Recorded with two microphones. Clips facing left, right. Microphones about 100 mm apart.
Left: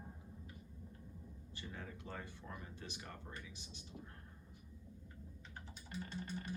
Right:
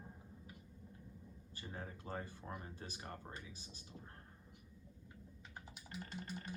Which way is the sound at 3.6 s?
40° right (ahead or behind).